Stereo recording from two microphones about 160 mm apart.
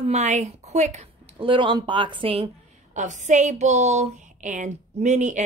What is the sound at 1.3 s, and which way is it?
A woman's voice, 30° right (ahead or behind).